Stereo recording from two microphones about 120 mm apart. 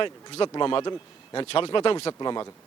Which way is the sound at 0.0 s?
45° left (ahead or behind).